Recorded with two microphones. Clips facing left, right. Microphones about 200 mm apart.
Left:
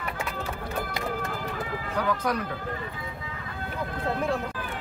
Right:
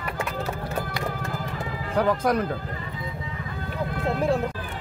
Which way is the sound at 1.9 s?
45° right (ahead or behind).